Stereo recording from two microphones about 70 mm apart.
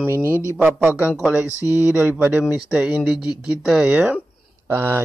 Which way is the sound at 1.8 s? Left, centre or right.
Right.